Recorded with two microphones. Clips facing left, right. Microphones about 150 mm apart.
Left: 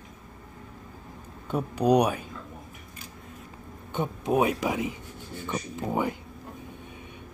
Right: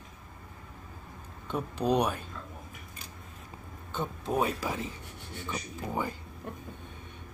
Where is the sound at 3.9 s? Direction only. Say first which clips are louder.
Left 5 dB; 15° left (ahead or behind).